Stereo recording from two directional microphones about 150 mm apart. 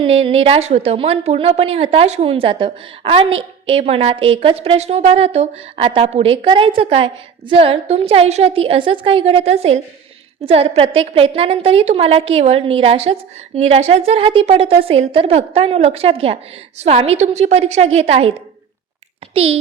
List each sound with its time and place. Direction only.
0.0 s a woman's voice: 40° right (ahead or behind)